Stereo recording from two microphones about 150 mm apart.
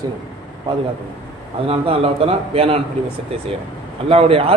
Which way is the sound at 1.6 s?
40° right (ahead or behind).